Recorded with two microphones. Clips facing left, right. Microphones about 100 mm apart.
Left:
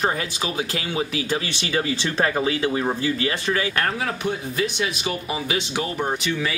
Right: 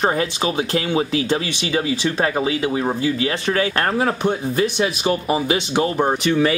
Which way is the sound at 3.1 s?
25° right (ahead or behind).